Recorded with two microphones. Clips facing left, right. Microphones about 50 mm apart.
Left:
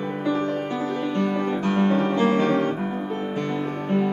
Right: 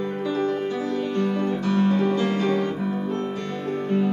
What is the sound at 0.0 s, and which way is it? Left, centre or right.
Music, left.